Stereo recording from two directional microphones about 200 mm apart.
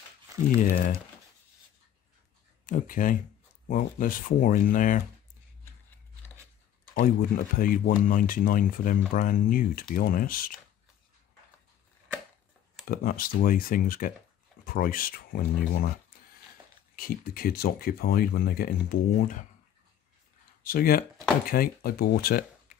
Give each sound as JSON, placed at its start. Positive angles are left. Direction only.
{"t": 0.6, "sound": "speech", "side_deg": 40}
{"t": 2.6, "sound": "speech", "side_deg": 40}
{"t": 6.9, "sound": "speech", "side_deg": 45}
{"t": 12.8, "sound": "speech", "side_deg": 45}
{"t": 16.9, "sound": "speech", "side_deg": 45}
{"t": 20.6, "sound": "speech", "side_deg": 45}